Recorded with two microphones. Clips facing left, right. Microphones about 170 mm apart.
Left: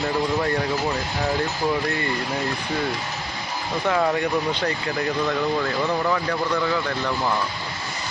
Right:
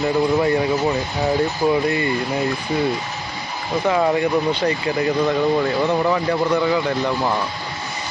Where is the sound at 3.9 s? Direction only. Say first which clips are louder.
Right 3 dB; 10° right (ahead or behind).